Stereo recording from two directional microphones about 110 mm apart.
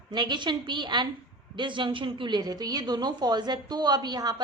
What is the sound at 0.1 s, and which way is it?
A woman's voice, 40° right (ahead or behind).